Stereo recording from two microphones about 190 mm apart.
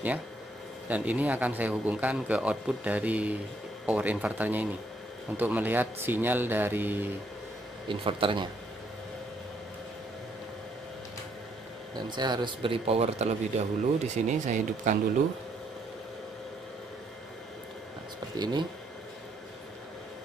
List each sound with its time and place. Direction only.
0.8 s a man's voice: 10° right (ahead or behind)
7.9 s speech: 25° right (ahead or behind)
11.9 s speech: 20° right (ahead or behind); by 15.0 s 40° right (ahead or behind)
18.4 s speech: 25° right (ahead or behind)